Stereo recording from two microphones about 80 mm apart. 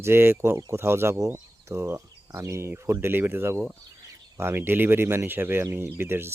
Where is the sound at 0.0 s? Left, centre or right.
Right.